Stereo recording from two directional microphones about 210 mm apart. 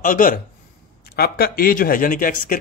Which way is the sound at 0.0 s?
40° left (ahead or behind).